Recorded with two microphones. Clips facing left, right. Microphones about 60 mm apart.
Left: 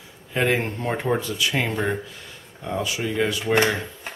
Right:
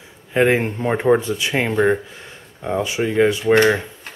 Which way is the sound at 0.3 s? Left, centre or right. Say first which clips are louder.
Right 6 dB; right.